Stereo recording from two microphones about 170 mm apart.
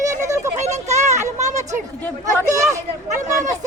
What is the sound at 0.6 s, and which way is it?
Speech, 40° right (ahead or behind).